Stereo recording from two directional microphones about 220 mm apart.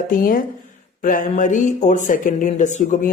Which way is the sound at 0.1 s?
40° left (ahead or behind).